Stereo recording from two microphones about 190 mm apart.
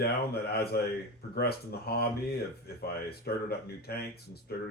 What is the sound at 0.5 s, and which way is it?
Speech, 55° left (ahead or behind).